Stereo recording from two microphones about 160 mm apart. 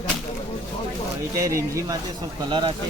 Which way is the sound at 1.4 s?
20° right (ahead or behind).